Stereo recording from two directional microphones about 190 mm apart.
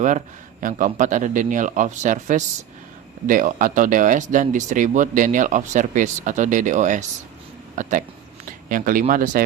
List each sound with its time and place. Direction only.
0.6 s speech: 40° right (ahead or behind)